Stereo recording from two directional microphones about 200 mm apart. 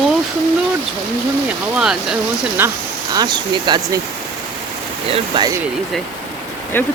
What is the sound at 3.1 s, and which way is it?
Speech, 20° right (ahead or behind).